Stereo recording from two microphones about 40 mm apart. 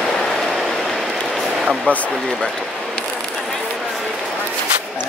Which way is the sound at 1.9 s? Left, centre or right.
Left.